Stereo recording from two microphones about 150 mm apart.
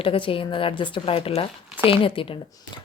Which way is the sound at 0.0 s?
35° left (ahead or behind).